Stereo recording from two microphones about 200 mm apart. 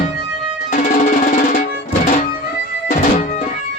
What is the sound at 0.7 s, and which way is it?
Music, 40° left (ahead or behind).